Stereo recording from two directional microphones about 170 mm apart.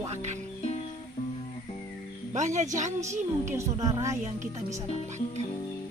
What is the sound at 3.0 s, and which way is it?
A woman's voice, 15° right (ahead or behind).